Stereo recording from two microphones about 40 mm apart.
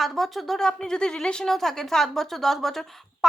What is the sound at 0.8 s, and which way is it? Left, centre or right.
A woman's voice, centre.